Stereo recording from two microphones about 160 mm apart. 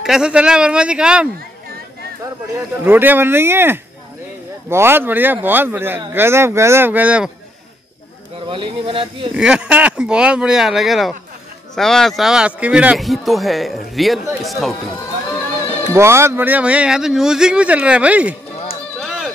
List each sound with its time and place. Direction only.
0.0 s speech: 5° right (ahead or behind)
2.8 s speech: 10° right (ahead or behind)
8.5 s speech: 30° right (ahead or behind)
9.4 s speech: 5° right (ahead or behind)
15.9 s speech: 15° right (ahead or behind)
18.9 s a sound: centre (ahead or behind)